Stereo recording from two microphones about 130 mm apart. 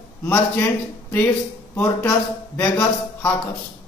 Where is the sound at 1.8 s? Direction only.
20° left (ahead or behind).